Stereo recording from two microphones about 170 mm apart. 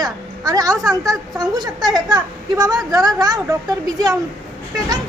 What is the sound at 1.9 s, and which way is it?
A woman's voice, 25° right (ahead or behind).